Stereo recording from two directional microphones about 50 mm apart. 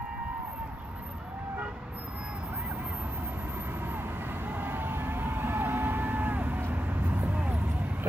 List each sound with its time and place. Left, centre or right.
4.5 s vehicle: right